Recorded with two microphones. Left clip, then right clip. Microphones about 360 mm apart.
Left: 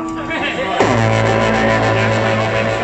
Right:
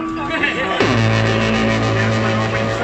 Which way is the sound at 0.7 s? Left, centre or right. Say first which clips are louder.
Left 3 dB; centre.